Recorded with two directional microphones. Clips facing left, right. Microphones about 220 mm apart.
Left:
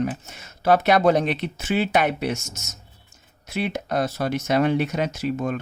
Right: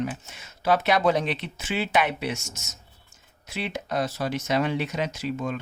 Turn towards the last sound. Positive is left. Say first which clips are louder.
# left 4 dB
turn(degrees=50)  # may be behind; listen again after turning